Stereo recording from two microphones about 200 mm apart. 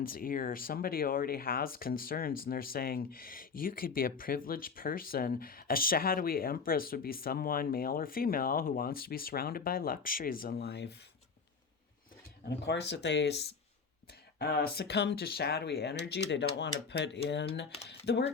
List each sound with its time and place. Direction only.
0.0 s speech: 45° left (ahead or behind)
12.5 s speech: 55° left (ahead or behind)
14.3 s speech: 50° left (ahead or behind)